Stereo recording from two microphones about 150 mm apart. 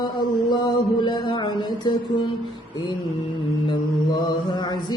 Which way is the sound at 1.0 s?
30° left (ahead or behind).